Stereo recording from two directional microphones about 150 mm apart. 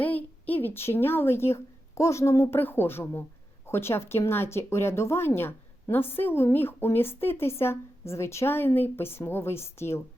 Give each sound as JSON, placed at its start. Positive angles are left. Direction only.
{"t": 0.0, "sound": "speech", "side_deg": 10}